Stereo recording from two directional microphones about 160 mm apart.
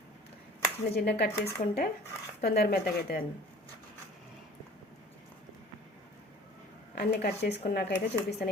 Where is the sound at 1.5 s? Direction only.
80° left.